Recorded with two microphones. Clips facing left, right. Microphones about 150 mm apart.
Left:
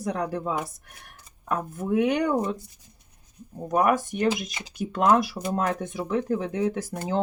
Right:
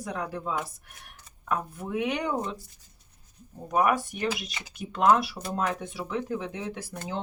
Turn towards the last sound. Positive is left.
turn(degrees=45)  # may be behind; listen again after turning